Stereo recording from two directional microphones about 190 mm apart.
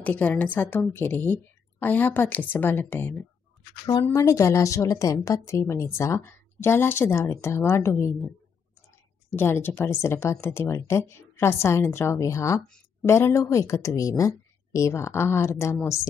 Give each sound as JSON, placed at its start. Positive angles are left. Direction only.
{"t": 0.0, "sound": "a woman's voice", "side_deg": 10}
{"t": 9.3, "sound": "a woman's voice", "side_deg": 10}